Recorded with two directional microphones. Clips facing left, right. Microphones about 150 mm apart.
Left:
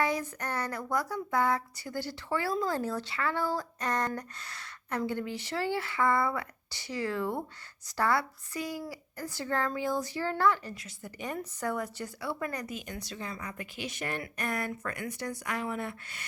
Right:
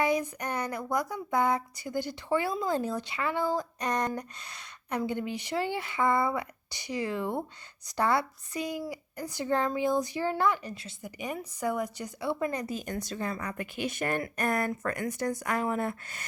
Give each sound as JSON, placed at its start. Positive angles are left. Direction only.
{"t": 0.0, "sound": "speech", "side_deg": -15}
{"t": 12.7, "sound": "speech", "side_deg": -45}